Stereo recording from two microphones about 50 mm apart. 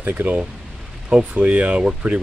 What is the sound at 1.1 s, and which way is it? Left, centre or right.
Speech, right.